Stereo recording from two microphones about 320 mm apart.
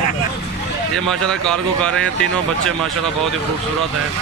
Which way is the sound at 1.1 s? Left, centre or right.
Centre.